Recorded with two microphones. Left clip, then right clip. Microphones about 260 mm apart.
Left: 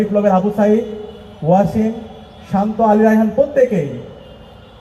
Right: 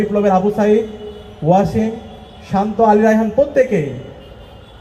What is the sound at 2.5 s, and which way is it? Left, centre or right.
Speech, right.